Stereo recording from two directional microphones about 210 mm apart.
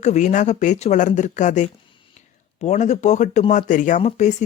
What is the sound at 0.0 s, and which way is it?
Speech, 35° left (ahead or behind).